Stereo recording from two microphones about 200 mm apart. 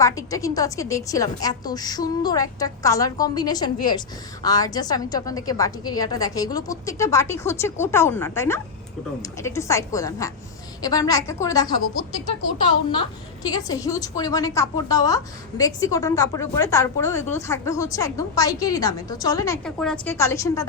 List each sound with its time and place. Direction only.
0.0 s a woman's voice: 15° left (ahead or behind)
13.4 s a woman's voice: 20° left (ahead or behind)
19.6 s a woman's voice: 5° left (ahead or behind)
20.1 s a woman's voice: 15° left (ahead or behind)